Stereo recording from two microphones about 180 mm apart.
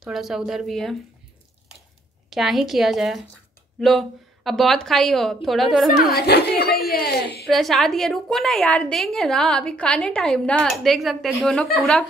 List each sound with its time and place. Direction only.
0.0 s a woman's voice: centre (ahead or behind)
2.2 s a woman's voice: centre (ahead or behind)
6.1 s a woman's voice: 65° left (ahead or behind)
7.4 s a woman's voice: centre (ahead or behind)